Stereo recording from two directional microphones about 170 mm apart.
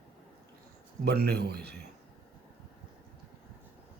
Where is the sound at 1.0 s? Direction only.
70° right (ahead or behind).